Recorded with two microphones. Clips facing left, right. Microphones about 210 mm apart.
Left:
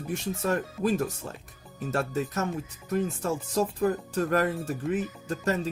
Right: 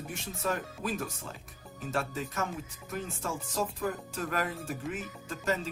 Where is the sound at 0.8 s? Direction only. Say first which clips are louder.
Left 8 dB; 40° left (ahead or behind).